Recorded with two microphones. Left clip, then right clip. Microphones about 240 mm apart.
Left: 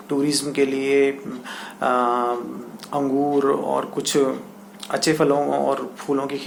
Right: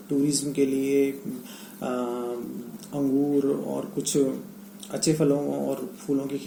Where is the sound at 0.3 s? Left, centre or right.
Left.